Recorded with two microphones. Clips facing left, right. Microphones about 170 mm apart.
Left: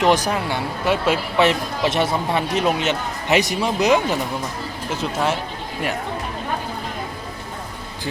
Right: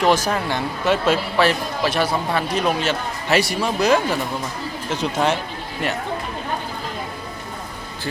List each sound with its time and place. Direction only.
0.0 s speech: 15° left (ahead or behind)
1.4 s speech: 25° left (ahead or behind)
4.9 s speech: 5° left (ahead or behind)